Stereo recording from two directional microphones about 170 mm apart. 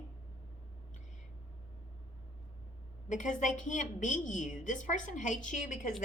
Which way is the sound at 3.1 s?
45° left (ahead or behind).